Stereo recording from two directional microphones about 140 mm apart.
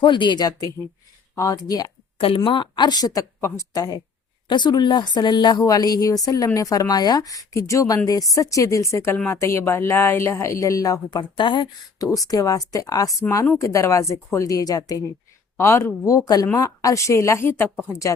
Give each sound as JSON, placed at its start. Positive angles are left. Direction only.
{"t": 0.0, "sound": "a woman's voice", "side_deg": 35}
{"t": 2.1, "sound": "a woman's voice", "side_deg": 40}